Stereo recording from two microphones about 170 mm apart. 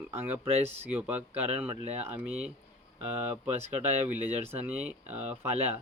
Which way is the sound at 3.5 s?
40° right (ahead or behind).